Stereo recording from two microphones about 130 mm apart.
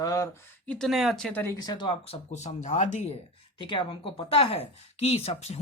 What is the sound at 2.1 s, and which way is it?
Speech, 60° left (ahead or behind).